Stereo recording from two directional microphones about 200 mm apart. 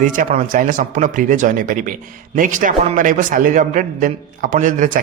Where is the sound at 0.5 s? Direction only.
40° right (ahead or behind).